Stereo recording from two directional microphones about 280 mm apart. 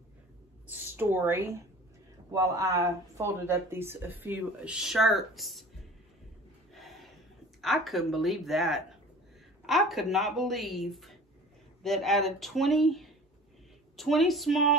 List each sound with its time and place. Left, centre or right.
0.7 s speech: centre
6.7 s a sound: centre
7.6 s a woman's voice: centre